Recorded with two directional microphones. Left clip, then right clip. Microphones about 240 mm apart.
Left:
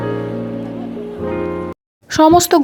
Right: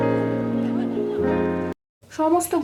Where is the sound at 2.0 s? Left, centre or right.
Left.